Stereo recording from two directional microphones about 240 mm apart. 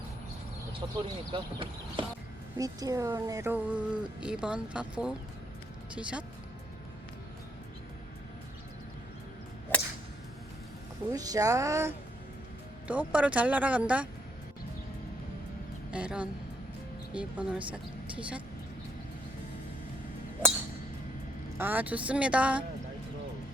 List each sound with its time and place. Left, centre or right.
1.3 s speech: right; by 6.2 s centre
9.7 s a sound: centre
11.1 s speech: centre
15.9 s speech: centre
20.4 s music: centre
21.6 s speech: centre